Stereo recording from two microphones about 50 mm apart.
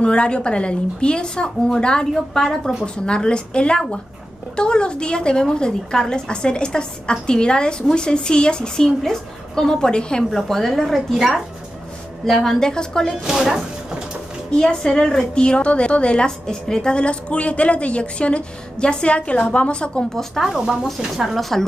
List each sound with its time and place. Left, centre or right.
0.0 s a woman's voice: centre
10.3 s a woman's voice: centre
11.1 s speech: centre
12.3 s a woman's voice: centre
12.5 s a woman's voice: centre
13.3 s speech: centre
14.5 s a woman's voice: centre
20.1 s a woman's voice: centre
20.4 s a woman's voice: centre